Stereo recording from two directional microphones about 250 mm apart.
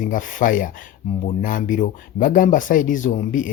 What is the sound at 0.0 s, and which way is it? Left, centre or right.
Speech, left.